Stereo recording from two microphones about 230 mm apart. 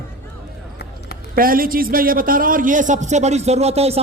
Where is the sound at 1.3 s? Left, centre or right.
Right.